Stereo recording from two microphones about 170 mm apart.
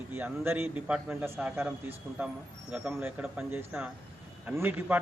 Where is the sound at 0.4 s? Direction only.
10° right (ahead or behind).